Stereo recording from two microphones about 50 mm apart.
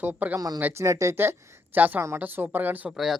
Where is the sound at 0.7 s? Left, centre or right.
Right.